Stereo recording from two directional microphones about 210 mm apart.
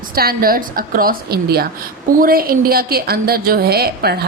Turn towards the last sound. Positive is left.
turn(degrees=-50)  # may be behind; listen again after turning